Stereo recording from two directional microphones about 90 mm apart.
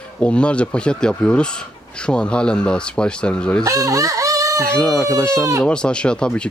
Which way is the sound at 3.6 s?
40° right (ahead or behind).